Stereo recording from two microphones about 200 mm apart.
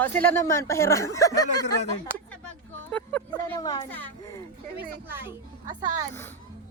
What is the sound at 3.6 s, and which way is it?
Speech, 20° left (ahead or behind).